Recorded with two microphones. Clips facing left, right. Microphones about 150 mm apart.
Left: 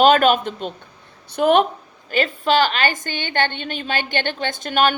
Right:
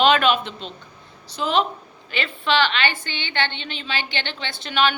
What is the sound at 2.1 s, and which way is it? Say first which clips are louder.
A woman's voice: left 5 dB; 40° left (ahead or behind).